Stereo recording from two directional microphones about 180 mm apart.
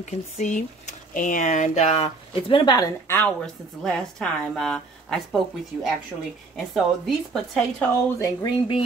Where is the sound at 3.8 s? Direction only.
Centre (ahead or behind).